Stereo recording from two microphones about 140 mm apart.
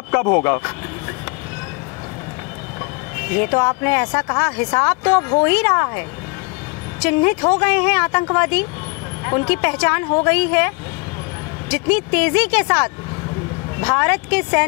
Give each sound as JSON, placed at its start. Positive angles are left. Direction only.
{"t": 0.1, "sound": "speech", "side_deg": 20}
{"t": 3.3, "sound": "a woman's voice", "side_deg": 15}
{"t": 11.7, "sound": "speech", "side_deg": 15}